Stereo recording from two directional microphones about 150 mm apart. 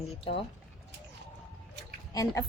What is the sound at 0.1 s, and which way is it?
Speech, 40° left (ahead or behind).